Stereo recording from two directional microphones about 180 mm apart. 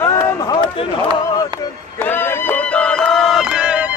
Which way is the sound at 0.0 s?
15° left (ahead or behind).